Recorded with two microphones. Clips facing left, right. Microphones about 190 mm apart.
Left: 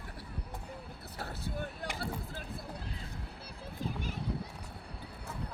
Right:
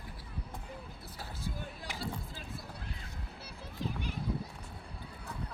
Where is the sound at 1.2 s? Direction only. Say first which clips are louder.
Left 3 dB; 65° left (ahead or behind).